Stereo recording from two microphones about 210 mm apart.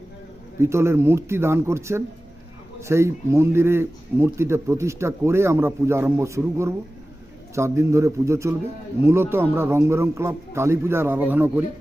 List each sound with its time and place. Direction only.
0.6 s speech: 10° right (ahead or behind)